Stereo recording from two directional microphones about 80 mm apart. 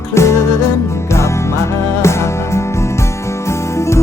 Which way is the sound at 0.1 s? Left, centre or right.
Left.